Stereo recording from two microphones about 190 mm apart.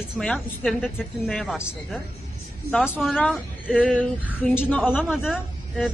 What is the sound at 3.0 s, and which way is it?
Speech, 5° left (ahead or behind).